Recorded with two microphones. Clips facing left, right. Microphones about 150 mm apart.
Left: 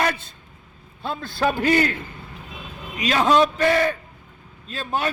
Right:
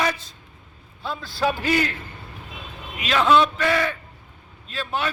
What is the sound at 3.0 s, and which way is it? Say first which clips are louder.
Speech: left 1 dB; 40° left (ahead or behind).